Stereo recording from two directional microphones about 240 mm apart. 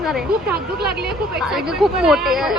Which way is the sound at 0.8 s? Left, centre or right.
Right.